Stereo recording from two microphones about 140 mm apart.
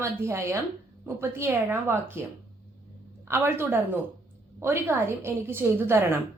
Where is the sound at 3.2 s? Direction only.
15° right (ahead or behind).